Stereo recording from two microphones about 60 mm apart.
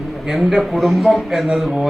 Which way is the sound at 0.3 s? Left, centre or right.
Centre.